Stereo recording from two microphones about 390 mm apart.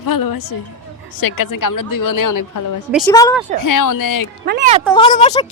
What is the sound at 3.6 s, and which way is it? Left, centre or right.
Speech, left.